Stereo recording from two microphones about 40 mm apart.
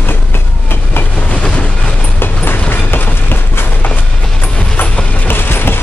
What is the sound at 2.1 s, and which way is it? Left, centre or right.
Vehicle, left.